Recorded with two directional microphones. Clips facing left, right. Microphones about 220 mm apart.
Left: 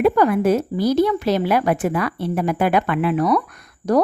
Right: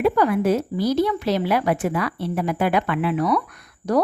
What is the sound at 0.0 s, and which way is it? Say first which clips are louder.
Speech: left 3 dB; 50° left (ahead or behind).